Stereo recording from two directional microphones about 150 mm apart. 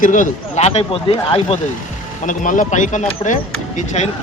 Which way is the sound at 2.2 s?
60° left (ahead or behind).